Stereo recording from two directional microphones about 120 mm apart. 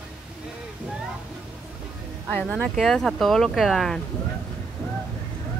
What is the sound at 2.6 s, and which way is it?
Speech, 5° left (ahead or behind).